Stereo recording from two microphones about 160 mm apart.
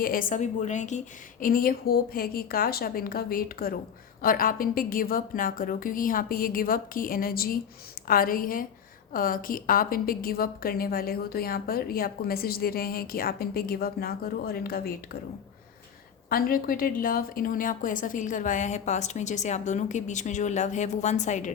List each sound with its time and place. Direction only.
0.0 s a woman's voice: 60° left (ahead or behind)
16.3 s a woman's voice: 65° left (ahead or behind); by 21.5 s 50° left (ahead or behind)